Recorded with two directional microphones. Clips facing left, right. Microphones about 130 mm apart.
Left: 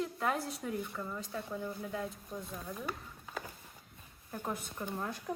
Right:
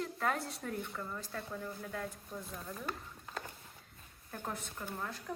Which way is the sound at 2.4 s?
Centre (ahead or behind).